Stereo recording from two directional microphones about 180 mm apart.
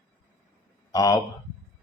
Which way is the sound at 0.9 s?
20° left (ahead or behind).